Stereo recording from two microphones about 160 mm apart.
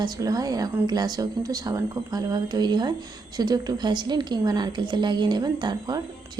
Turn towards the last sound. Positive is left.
turn(degrees=-25)  # may be behind; listen again after turning